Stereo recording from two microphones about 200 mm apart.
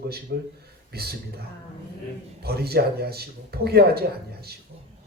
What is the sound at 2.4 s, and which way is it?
A man's voice, 50° right (ahead or behind).